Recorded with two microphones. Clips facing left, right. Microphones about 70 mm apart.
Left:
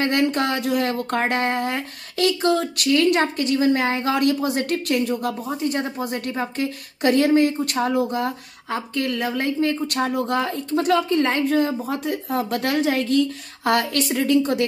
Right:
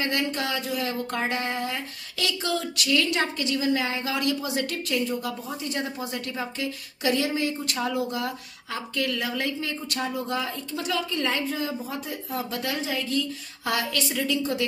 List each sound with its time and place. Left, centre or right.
0.0 s speech: left
5.5 s speech: left